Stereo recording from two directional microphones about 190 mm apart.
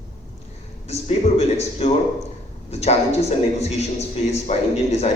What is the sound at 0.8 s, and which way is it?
Speech, 35° left (ahead or behind).